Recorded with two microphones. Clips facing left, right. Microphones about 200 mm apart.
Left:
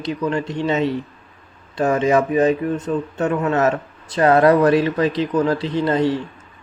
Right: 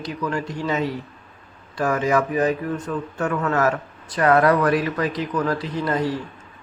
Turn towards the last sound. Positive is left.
turn(degrees=25)  # may be behind; listen again after turning